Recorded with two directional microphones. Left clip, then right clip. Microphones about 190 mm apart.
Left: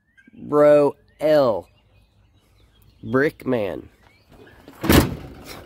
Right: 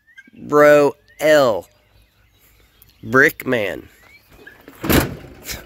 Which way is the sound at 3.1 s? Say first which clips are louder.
Right 6 dB; centre (ahead or behind).